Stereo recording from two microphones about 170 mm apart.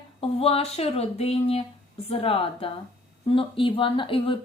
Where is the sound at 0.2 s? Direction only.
35° left (ahead or behind).